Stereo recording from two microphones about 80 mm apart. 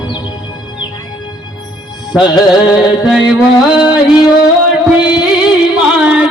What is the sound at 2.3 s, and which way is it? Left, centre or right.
Music, left.